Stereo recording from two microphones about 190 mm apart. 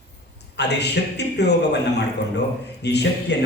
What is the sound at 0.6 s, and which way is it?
Speech, 65° left (ahead or behind).